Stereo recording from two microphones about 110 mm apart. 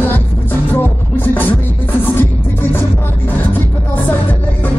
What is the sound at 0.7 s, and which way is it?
Music, 15° left (ahead or behind).